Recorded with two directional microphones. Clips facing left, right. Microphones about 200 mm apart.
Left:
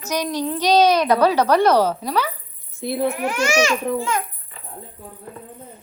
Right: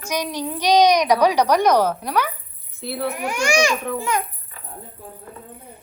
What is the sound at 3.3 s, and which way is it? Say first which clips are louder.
Speech: right 3 dB; 15° right (ahead or behind).